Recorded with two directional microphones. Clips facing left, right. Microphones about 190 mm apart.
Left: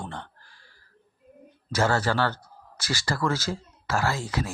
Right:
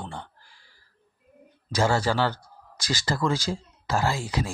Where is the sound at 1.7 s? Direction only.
15° right (ahead or behind).